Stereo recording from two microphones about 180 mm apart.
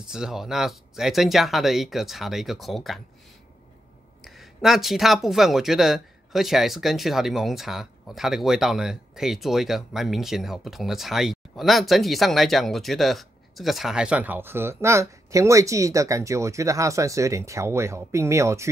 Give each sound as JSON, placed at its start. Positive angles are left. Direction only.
{"t": 0.0, "sound": "speech", "side_deg": -5}
{"t": 4.2, "sound": "speech", "side_deg": 0}